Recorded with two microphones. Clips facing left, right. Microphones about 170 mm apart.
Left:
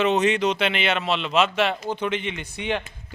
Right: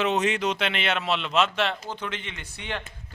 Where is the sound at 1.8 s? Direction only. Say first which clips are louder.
Left 8 dB; 15° left (ahead or behind).